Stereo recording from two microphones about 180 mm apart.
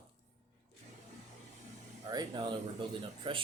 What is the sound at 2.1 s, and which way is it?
Speech, 25° right (ahead or behind).